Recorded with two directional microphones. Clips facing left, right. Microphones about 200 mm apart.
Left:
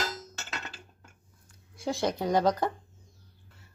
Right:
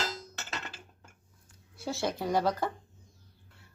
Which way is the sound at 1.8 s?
15° left (ahead or behind).